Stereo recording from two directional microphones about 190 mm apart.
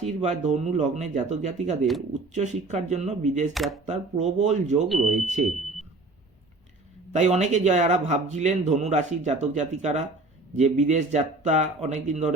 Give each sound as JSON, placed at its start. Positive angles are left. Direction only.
{"t": 0.0, "sound": "a man's voice", "side_deg": -35}
{"t": 3.5, "sound": "speech", "side_deg": 0}
{"t": 3.8, "sound": "a man's voice", "side_deg": -35}
{"t": 7.1, "sound": "a man's voice", "side_deg": -35}